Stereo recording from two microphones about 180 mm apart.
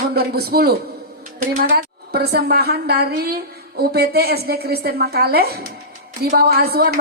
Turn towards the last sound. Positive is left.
turn(degrees=-60)  # may be behind; listen again after turning